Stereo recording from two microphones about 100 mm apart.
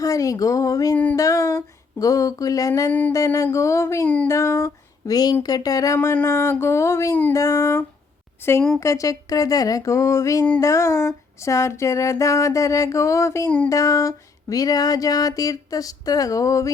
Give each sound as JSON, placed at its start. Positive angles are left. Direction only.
{"t": 0.0, "sound": "music", "side_deg": 35}
{"t": 6.2, "sound": "a sound", "side_deg": 25}
{"t": 8.8, "sound": "music", "side_deg": 30}